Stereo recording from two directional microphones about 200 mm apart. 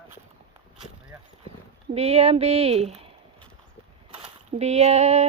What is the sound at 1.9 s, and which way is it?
Speech, 30° right (ahead or behind).